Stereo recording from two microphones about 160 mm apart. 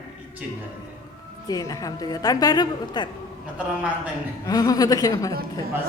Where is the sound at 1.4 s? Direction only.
20° left (ahead or behind).